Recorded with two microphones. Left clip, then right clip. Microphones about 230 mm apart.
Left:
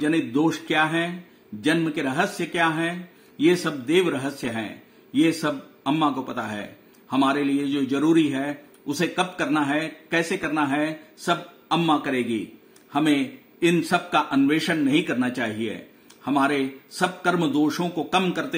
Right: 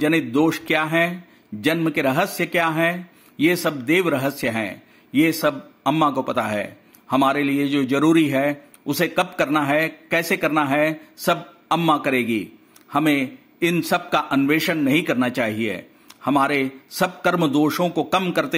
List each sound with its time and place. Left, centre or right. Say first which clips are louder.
0.0 s a man's voice: right 4 dB; right